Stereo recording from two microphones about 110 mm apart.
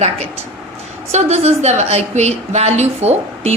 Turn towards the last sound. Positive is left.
turn(degrees=-75)  # may be behind; listen again after turning